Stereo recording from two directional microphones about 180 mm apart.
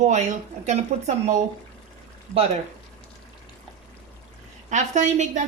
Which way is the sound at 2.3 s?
5° left (ahead or behind).